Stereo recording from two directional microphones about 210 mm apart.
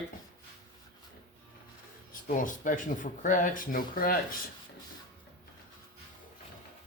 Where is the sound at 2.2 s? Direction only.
40° left (ahead or behind).